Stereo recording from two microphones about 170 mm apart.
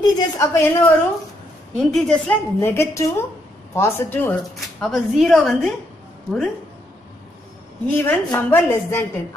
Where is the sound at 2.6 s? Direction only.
15° left (ahead or behind).